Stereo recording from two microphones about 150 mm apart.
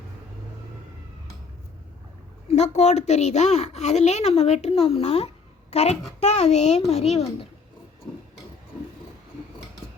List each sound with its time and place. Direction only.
2.5 s a woman's voice: 50° left (ahead or behind)